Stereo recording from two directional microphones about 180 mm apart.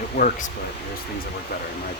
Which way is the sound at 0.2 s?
60° left (ahead or behind).